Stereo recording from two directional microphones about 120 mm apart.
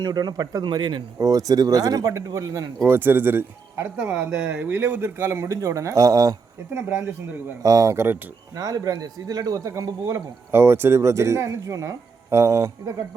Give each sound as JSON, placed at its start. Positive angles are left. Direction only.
{"t": 0.0, "sound": "speech", "side_deg": -35}
{"t": 1.2, "sound": "speech", "side_deg": -30}